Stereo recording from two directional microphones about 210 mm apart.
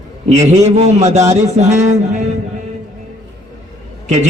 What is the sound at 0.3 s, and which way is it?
A man's voice, 35° right (ahead or behind).